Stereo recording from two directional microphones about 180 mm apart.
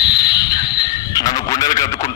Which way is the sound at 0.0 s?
25° left (ahead or behind).